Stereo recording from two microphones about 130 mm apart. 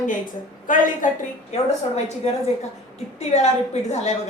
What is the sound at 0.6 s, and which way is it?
Speech, 90° left.